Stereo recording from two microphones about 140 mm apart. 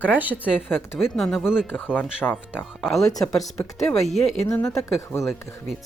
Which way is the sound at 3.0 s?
25° left (ahead or behind).